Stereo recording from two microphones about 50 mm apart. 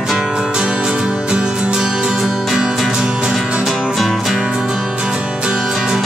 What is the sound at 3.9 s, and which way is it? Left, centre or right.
Music, centre.